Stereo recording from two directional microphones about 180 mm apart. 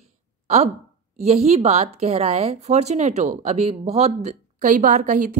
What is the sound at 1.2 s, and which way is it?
Speech, 35° right (ahead or behind).